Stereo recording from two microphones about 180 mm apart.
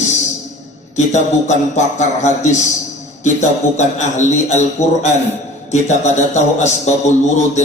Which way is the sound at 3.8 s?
40° left (ahead or behind).